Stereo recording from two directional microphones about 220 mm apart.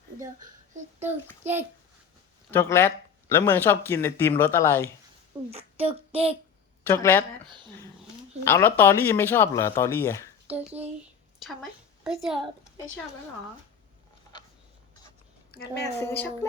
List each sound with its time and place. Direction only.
2.5 s speech: 10° left (ahead or behind)
5.5 s speech: 25° right (ahead or behind)
6.8 s speech: 10° left (ahead or behind)
7.4 s speech: 20° right (ahead or behind)
8.4 s speech: 10° left (ahead or behind)
10.4 s a child's voice: 5° right (ahead or behind)
15.8 s speech: 10° left (ahead or behind)